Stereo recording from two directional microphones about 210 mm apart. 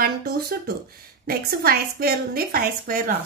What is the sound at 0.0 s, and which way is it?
A woman's voice, 50° right (ahead or behind).